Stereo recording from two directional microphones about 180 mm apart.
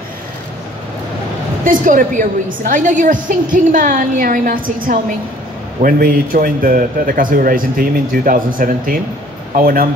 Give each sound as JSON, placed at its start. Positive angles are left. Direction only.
{"t": 1.6, "sound": "a man's voice", "side_deg": -50}
{"t": 5.8, "sound": "a man's voice", "side_deg": -50}